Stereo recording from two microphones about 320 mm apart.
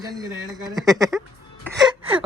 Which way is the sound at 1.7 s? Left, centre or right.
Centre.